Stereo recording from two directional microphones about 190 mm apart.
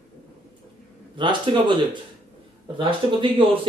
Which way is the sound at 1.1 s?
25° right (ahead or behind).